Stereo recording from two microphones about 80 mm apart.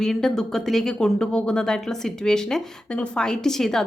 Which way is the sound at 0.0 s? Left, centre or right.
Centre.